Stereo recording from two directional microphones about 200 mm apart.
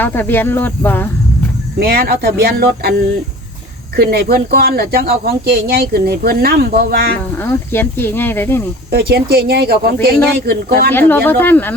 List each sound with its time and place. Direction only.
0.0 s speech: 10° left (ahead or behind)
1.8 s speech: 50° right (ahead or behind)
3.9 s speech: 55° right (ahead or behind)
7.3 s speech: 10° left (ahead or behind)
8.9 s speech: 55° right (ahead or behind)
10.9 s speech: 10° left (ahead or behind)